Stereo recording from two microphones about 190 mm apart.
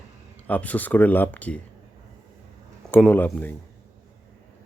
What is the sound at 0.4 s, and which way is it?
Speech, 10° left (ahead or behind).